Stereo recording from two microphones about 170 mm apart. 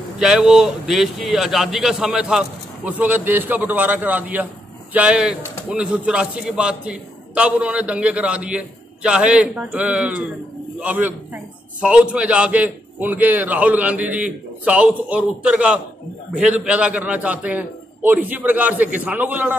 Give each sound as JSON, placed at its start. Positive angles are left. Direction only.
{"t": 0.2, "sound": "a man's voice", "side_deg": -5}